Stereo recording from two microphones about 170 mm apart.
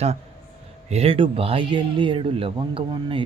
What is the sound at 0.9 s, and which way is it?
Speech, 35° right (ahead or behind).